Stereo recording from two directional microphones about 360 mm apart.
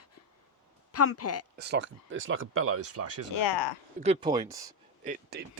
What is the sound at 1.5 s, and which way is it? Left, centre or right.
Speech, right.